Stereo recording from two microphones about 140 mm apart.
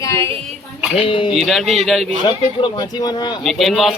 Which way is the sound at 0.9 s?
40° left (ahead or behind).